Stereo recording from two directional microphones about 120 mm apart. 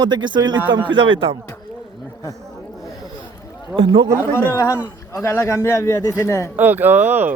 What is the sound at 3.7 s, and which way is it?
Speech, 45° right (ahead or behind).